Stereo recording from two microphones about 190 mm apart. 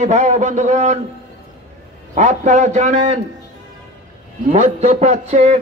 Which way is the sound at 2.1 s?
40° right (ahead or behind).